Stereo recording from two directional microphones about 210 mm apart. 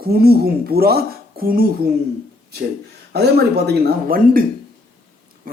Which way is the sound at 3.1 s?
50° right (ahead or behind).